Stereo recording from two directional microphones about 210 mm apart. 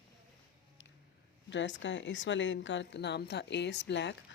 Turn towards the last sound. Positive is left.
turn(degrees=55)  # may be behind; listen again after turning